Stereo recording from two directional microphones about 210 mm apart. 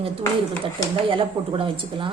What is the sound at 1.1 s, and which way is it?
Speech, 25° right (ahead or behind).